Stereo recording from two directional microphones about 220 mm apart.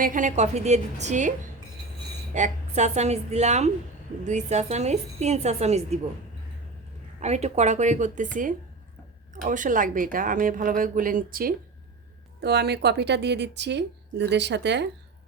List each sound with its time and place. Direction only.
0.0 s a woman's voice: 35° right (ahead or behind)
2.3 s a woman's voice: 35° right (ahead or behind)
7.2 s a woman's voice: 30° right (ahead or behind); by 14.8 s 50° right (ahead or behind)